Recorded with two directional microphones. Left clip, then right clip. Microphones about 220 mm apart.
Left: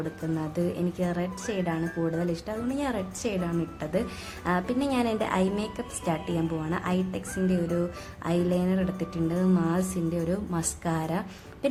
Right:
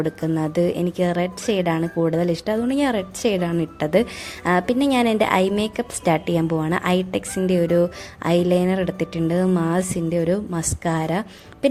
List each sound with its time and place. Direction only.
0.3 s a woman's voice: 35° right (ahead or behind)